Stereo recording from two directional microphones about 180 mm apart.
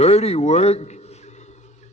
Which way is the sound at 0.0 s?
35° left (ahead or behind).